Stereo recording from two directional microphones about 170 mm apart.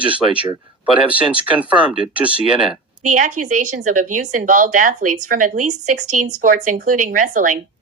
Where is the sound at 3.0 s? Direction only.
45° right (ahead or behind).